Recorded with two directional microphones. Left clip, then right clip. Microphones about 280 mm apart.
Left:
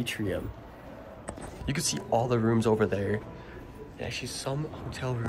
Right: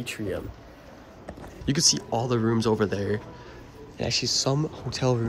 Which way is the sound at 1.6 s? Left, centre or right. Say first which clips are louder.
Right 7 dB; centre.